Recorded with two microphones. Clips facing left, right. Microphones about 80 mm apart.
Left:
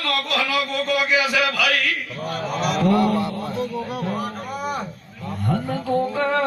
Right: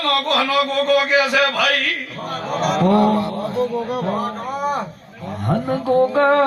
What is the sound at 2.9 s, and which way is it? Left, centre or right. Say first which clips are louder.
Speech: right 3 dB; right.